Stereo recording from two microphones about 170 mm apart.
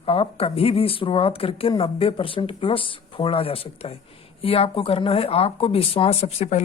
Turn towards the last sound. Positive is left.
turn(degrees=40)  # may be behind; listen again after turning